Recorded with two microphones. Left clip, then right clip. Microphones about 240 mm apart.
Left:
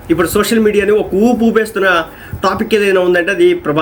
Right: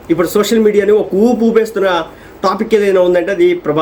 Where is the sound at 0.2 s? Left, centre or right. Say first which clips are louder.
Right 2 dB; centre.